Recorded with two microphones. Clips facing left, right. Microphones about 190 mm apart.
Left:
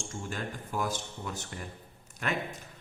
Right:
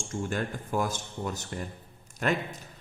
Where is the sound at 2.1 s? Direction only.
40° right (ahead or behind).